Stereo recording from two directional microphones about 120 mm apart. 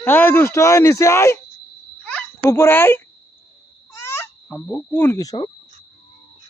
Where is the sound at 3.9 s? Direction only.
20° left (ahead or behind).